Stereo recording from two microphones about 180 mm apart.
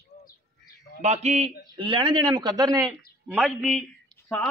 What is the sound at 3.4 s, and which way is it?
Speech, centre (ahead or behind).